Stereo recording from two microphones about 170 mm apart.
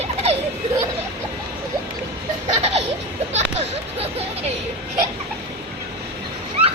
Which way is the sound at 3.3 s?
40° right (ahead or behind).